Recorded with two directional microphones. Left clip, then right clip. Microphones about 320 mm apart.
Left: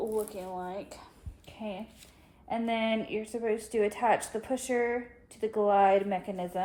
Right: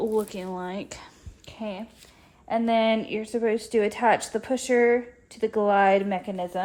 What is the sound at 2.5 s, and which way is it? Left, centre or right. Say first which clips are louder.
Speech: right 8 dB; right.